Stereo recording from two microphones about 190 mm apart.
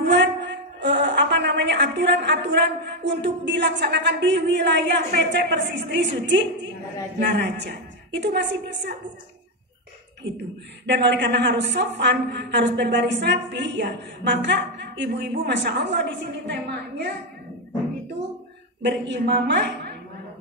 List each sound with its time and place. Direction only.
0.0 s a woman's voice: 65° right (ahead or behind)
10.9 s a woman's voice: 65° right (ahead or behind)
18.8 s a woman's voice: 65° right (ahead or behind)